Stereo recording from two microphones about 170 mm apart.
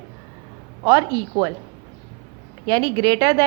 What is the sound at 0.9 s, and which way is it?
Speech, 20° right (ahead or behind).